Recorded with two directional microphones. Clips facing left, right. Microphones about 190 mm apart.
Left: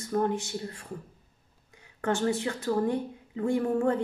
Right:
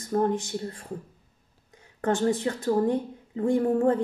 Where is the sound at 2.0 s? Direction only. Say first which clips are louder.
Right 3 dB; 40° right (ahead or behind).